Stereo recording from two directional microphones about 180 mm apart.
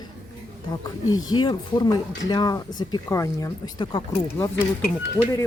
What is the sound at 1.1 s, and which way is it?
Speech, 25° left (ahead or behind).